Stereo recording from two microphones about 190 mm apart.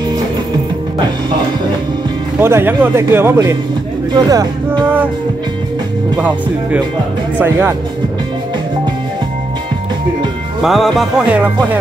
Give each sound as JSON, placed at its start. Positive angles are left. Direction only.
{"t": 2.4, "sound": "a man's voice", "side_deg": -10}
{"t": 6.1, "sound": "a man's voice", "side_deg": -5}
{"t": 10.6, "sound": "music", "side_deg": 0}